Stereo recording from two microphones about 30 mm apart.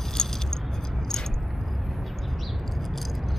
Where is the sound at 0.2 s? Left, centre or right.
Left.